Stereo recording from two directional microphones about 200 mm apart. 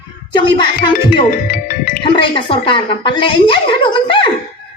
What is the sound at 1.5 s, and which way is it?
Speech, 45° left (ahead or behind).